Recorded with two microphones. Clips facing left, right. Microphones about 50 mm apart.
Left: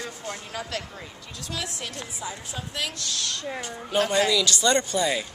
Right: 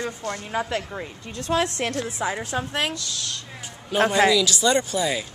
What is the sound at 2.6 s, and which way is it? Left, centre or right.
Speech, right.